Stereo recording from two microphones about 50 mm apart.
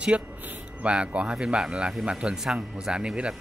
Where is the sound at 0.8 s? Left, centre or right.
Right.